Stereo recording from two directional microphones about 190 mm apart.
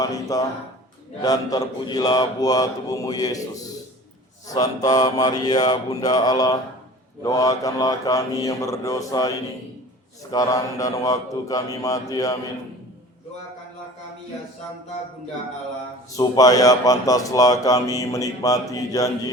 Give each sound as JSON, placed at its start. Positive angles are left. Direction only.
{"t": 0.0, "sound": "speech", "side_deg": 20}
{"t": 16.1, "sound": "speech", "side_deg": 20}